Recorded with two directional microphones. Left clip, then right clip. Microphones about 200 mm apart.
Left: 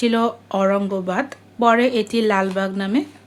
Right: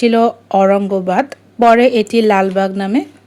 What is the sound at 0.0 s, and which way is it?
Speech, 20° right (ahead or behind).